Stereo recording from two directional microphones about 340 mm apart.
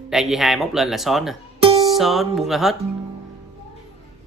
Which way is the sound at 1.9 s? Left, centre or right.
Centre.